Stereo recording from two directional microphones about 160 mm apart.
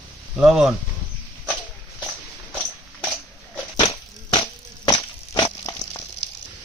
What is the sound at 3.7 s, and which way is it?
Crushing, 30° left (ahead or behind).